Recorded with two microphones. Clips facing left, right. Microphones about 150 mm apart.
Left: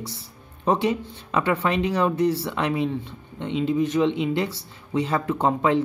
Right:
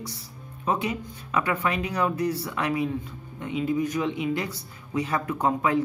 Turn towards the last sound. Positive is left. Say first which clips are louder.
# left 3 dB
turn(degrees=25)  # may be behind; listen again after turning